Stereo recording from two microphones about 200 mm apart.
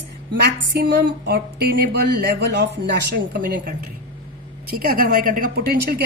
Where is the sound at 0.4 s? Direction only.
55° right (ahead or behind).